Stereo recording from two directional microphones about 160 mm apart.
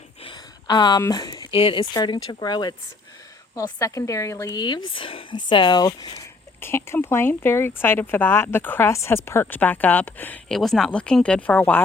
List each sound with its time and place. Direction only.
0.2 s speech: 30° left (ahead or behind); by 11.8 s 10° left (ahead or behind)